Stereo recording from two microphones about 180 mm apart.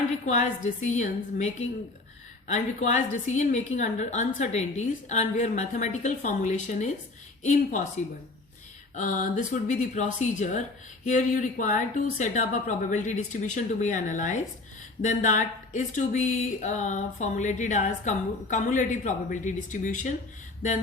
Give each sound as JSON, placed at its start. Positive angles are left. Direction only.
{"t": 0.3, "sound": "a woman's voice", "side_deg": 40}
{"t": 9.0, "sound": "speech", "side_deg": 45}